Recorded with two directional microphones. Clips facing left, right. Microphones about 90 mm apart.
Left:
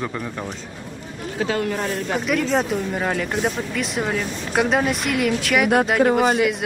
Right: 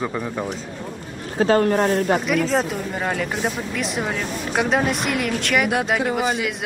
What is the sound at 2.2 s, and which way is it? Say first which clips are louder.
Speech: even; centre (ahead or behind).